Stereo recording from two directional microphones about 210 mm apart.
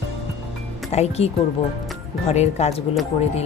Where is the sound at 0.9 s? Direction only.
30° left (ahead or behind).